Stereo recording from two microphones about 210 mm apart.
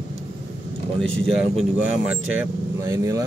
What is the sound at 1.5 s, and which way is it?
Speech, 5° right (ahead or behind).